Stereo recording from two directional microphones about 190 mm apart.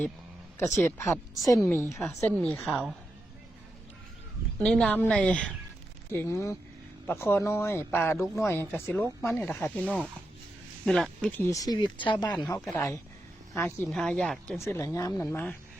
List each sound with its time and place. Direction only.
0.8 s speech: 15° left (ahead or behind)
1.9 s speech: 5° left (ahead or behind)
4.6 s speech: 5° left (ahead or behind)
11.5 s speech: 20° left (ahead or behind)
12.5 s speech: 10° left (ahead or behind)
13.8 s speech: 5° left (ahead or behind)